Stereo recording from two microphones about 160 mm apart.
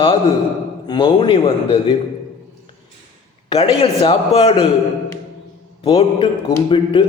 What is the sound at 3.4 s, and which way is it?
A woman's voice, 35° left (ahead or behind).